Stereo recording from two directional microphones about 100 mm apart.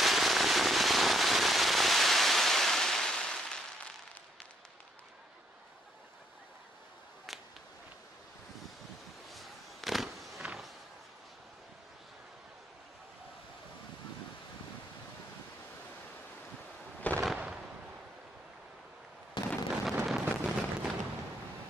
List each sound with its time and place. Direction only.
0.0 s firecracker: centre (ahead or behind)
7.3 s a sound: centre (ahead or behind)
9.3 s a sound: centre (ahead or behind)
17.1 s fireworks: 15° left (ahead or behind)
19.4 s explosion: 50° left (ahead or behind)
19.7 s vehicle: 5° right (ahead or behind)